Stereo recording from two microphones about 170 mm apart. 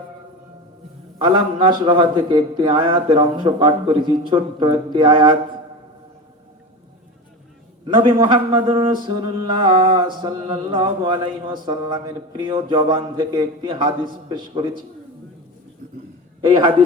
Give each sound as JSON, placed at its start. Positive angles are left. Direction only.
{"t": 1.2, "sound": "speech", "side_deg": -30}
{"t": 7.9, "sound": "speech", "side_deg": -30}
{"t": 16.4, "sound": "speech", "side_deg": -30}